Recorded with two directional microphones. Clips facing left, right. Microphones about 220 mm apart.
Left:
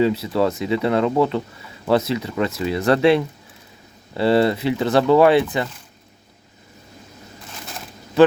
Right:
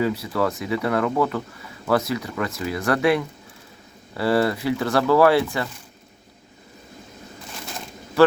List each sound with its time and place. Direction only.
0.0 s speech: 25° left (ahead or behind)